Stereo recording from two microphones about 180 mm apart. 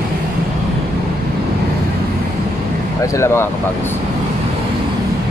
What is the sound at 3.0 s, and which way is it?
Speech, 15° left (ahead or behind).